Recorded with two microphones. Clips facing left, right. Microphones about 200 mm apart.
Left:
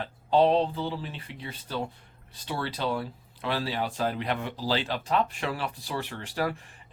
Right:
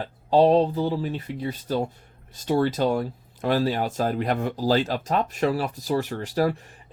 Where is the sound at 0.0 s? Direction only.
40° right (ahead or behind).